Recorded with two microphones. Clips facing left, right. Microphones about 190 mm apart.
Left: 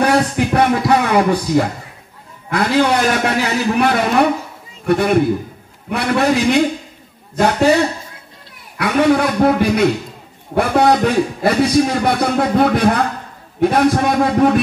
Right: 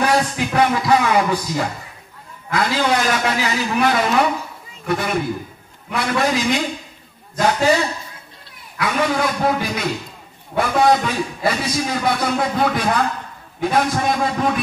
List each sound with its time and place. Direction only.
0.0 s a sound: 60° left (ahead or behind)
0.6 s music: 60° left (ahead or behind)
2.5 s a man's voice: 60° left (ahead or behind)
8.7 s a man's voice: 60° left (ahead or behind)